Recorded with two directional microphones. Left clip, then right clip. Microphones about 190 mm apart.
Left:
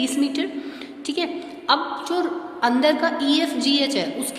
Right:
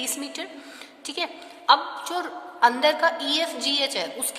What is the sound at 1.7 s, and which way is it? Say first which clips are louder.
A woman's voice: right 1 dB; 35° right (ahead or behind).